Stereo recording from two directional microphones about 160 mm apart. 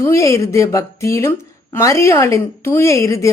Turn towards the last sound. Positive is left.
turn(degrees=20)  # may be behind; listen again after turning